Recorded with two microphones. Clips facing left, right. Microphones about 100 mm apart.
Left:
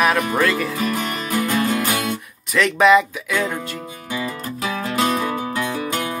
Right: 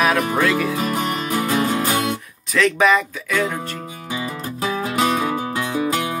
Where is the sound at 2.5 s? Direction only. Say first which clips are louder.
Left 2 dB; centre (ahead or behind).